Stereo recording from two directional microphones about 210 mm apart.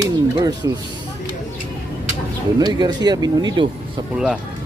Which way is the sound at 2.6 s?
20° right (ahead or behind).